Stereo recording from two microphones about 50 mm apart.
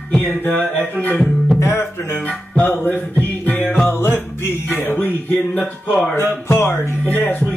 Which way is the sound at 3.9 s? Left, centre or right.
Left.